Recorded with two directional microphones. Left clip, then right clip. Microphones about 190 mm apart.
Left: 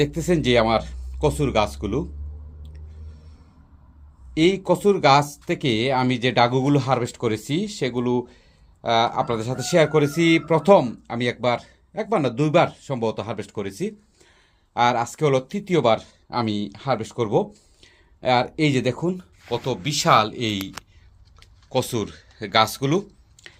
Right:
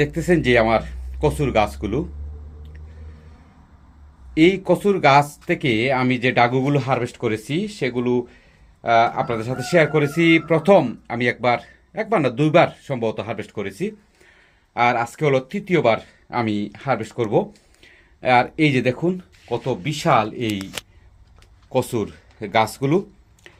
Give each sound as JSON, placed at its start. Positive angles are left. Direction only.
{"t": 0.0, "sound": "speech", "side_deg": 10}
{"t": 4.4, "sound": "speech", "side_deg": 10}
{"t": 21.7, "sound": "speech", "side_deg": -5}